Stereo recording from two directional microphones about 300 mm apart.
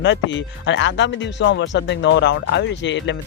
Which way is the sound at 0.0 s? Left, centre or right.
Left.